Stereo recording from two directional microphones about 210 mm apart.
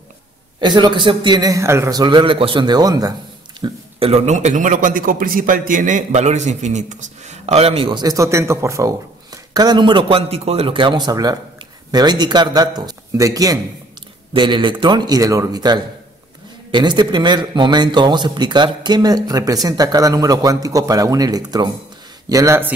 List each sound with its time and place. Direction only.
0.6 s a man's voice: 20° right (ahead or behind)
3.6 s a man's voice: 30° right (ahead or behind)